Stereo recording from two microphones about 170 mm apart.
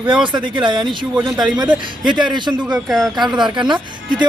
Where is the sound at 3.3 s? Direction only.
25° right (ahead or behind).